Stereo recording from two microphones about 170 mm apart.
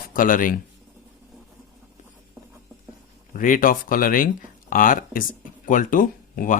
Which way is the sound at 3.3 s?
50° left (ahead or behind).